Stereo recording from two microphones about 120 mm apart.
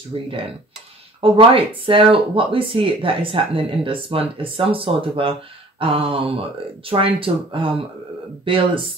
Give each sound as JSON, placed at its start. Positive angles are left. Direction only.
{"t": 1.3, "sound": "speech", "side_deg": -50}